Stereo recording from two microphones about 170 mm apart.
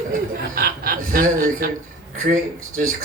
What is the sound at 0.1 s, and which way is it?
Chuckle, 55° right (ahead or behind).